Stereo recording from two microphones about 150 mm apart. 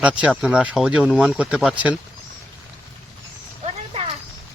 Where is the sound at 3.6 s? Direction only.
45° right (ahead or behind).